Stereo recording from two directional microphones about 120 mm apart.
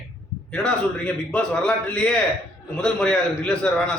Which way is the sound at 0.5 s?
10° left (ahead or behind).